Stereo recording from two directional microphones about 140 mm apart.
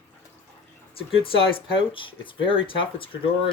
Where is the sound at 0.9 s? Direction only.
40° left (ahead or behind).